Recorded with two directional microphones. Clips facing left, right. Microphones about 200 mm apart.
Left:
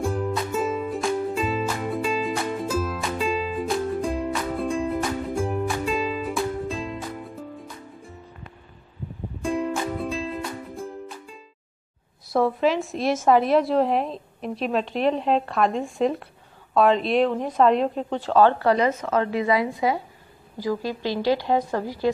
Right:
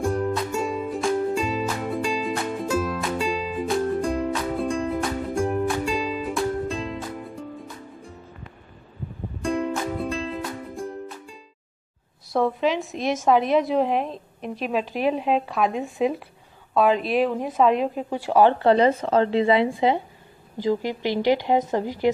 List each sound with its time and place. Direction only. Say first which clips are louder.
0.0 s music: right 2 dB; centre (ahead or behind)
9.4 s music: even; centre (ahead or behind)
12.4 s a woman's voice: left 1 dB; 5° left (ahead or behind); by 22.1 s 20° right (ahead or behind)